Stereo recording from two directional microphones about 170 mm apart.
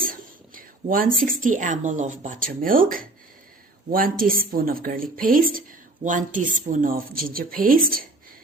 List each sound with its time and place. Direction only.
0.0 s a woman's voice: 55° right (ahead or behind)